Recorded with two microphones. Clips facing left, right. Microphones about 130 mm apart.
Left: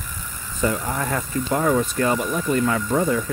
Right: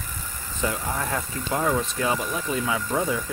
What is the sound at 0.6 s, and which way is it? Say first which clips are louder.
Speech: left 4 dB; 5° right (ahead or behind).